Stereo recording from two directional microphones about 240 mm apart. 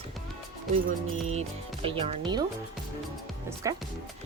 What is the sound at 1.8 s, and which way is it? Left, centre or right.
Speech, right.